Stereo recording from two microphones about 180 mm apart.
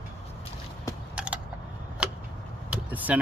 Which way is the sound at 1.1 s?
5° right (ahead or behind).